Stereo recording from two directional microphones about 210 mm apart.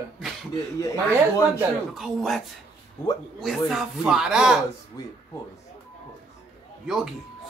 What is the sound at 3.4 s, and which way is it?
Speech, centre (ahead or behind).